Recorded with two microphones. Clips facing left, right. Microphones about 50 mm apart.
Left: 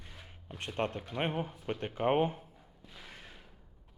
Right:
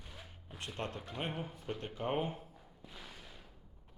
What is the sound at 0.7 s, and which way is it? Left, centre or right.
Speech, left.